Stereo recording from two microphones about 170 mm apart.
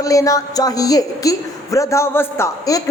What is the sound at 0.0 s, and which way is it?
A man's voice, 20° left (ahead or behind).